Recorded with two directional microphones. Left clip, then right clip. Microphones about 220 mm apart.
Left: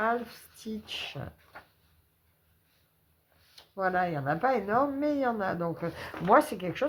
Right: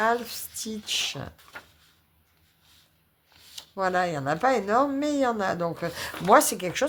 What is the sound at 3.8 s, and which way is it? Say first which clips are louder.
Speech: right 3 dB; 40° right (ahead or behind).